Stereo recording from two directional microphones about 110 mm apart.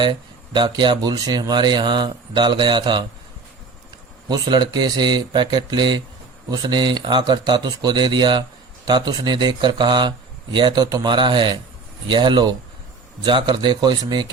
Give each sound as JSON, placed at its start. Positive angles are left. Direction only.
{"t": 0.0, "sound": "speech", "side_deg": -45}
{"t": 4.3, "sound": "speech", "side_deg": -45}